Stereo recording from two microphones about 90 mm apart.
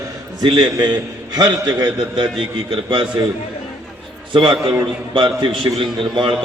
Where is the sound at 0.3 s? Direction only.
50° right (ahead or behind).